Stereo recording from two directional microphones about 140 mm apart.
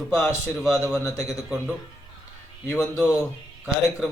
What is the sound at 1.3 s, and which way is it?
Speech, 5° right (ahead or behind).